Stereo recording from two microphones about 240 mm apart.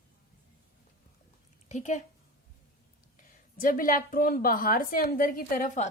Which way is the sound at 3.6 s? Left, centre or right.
Left.